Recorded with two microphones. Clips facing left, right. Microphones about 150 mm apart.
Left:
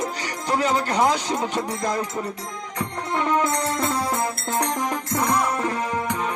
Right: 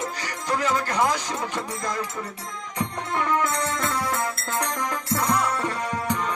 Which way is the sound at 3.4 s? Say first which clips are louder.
Left 3 dB; 30° left (ahead or behind).